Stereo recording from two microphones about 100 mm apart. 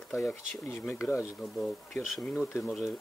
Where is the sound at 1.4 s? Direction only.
5° left (ahead or behind).